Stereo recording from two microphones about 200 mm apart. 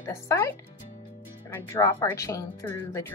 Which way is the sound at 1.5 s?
15° left (ahead or behind).